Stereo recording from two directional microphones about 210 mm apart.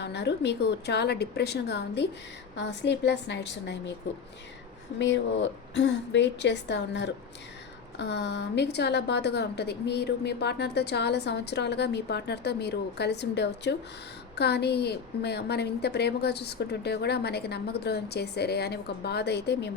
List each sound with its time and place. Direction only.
0.0 s a woman's voice: 55° left (ahead or behind)
4.9 s a woman's voice: 60° left (ahead or behind)